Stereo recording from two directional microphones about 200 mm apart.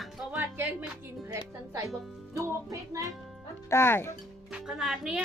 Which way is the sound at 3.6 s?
10° left (ahead or behind).